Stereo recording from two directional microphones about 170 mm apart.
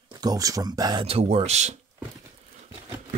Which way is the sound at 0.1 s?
20° right (ahead or behind).